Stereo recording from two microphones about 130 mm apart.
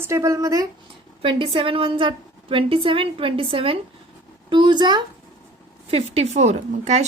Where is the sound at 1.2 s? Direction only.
40° right (ahead or behind).